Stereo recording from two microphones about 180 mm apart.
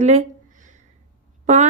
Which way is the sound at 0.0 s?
40° right (ahead or behind).